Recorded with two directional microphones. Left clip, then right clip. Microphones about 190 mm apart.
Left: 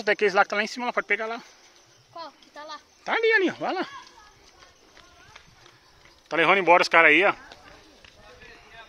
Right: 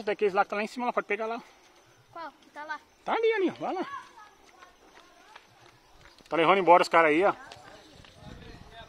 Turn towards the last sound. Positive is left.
turn(degrees=-5)  # may be behind; listen again after turning